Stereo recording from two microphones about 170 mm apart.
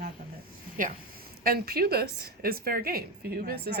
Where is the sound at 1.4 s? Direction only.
60° right (ahead or behind).